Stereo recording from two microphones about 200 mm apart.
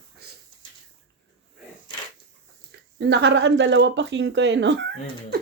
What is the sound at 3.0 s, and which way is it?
Speech, 60° right (ahead or behind).